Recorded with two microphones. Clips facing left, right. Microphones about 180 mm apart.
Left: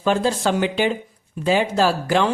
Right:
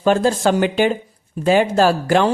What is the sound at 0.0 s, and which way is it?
Speech, 45° right (ahead or behind).